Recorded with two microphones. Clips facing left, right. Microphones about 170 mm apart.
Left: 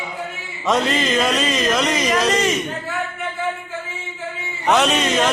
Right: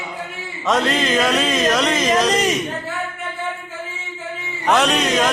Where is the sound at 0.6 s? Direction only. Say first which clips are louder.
Even; centre (ahead or behind).